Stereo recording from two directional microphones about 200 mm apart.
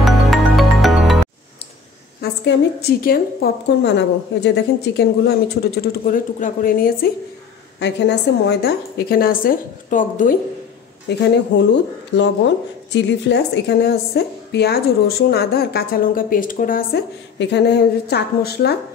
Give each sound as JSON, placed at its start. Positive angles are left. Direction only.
{"t": 0.0, "sound": "music", "side_deg": 0}
{"t": 2.4, "sound": "a woman's voice", "side_deg": 50}
{"t": 7.8, "sound": "a woman's voice", "side_deg": 60}
{"t": 11.1, "sound": "a woman's voice", "side_deg": 60}
{"t": 12.9, "sound": "a woman's voice", "side_deg": 55}
{"t": 17.4, "sound": "a woman's voice", "side_deg": 60}